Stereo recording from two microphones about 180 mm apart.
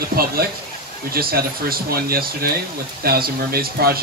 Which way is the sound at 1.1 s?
55° right (ahead or behind).